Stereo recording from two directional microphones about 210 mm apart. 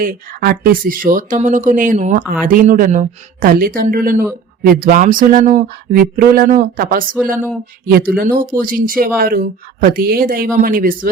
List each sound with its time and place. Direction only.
0.0 s speech: 40° right (ahead or behind)
8.1 s speech: 40° right (ahead or behind)